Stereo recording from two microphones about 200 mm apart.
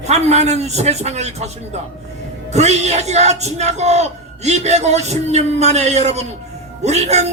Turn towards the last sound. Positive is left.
turn(degrees=-35)  # may be behind; listen again after turning